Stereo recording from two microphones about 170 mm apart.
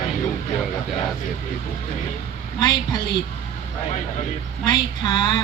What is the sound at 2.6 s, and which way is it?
Speech, 25° left (ahead or behind).